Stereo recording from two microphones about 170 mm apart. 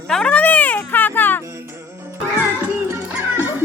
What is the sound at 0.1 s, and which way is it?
Music, 5° left (ahead or behind).